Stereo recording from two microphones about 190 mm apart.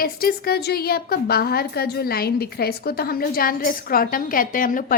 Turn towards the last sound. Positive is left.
turn(degrees=45)  # may be behind; listen again after turning